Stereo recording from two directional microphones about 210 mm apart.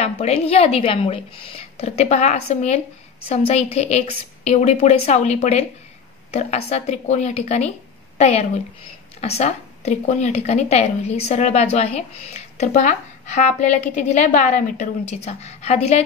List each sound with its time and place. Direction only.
0.0 s a woman's voice: 30° left (ahead or behind)